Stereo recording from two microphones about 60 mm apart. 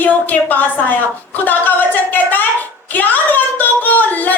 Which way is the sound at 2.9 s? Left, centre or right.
Left.